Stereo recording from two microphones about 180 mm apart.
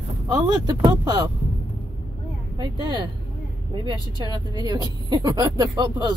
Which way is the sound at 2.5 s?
25° right (ahead or behind).